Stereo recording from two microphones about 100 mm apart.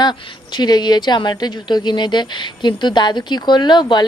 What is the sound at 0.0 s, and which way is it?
A woman's voice, 45° left (ahead or behind).